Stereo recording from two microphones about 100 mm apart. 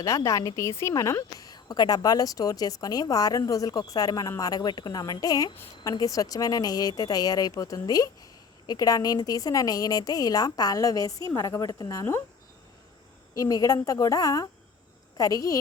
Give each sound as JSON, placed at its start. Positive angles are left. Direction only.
{"t": 0.0, "sound": "a woman's voice", "side_deg": 30}
{"t": 13.3, "sound": "a woman's voice", "side_deg": 35}